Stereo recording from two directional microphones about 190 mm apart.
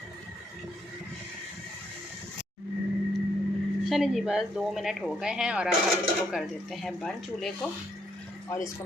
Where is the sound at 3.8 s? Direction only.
Centre (ahead or behind).